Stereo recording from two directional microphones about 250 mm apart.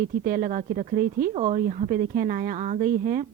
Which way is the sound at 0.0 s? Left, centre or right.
Right.